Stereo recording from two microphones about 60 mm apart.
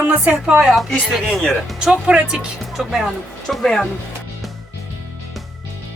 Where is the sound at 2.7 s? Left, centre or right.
Centre.